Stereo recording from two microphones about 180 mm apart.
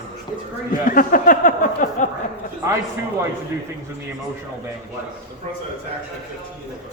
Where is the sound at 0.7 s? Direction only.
50° left (ahead or behind).